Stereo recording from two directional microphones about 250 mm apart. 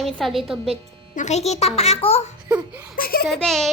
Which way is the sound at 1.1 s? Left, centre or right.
Left.